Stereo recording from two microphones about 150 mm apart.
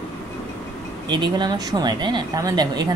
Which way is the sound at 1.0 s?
30° right (ahead or behind).